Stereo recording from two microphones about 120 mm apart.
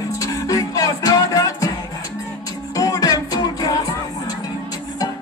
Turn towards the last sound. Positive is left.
turn(degrees=30)  # may be behind; listen again after turning